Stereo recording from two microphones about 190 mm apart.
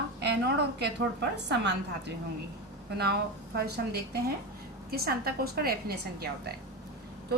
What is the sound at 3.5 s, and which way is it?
A woman's voice, 55° right (ahead or behind).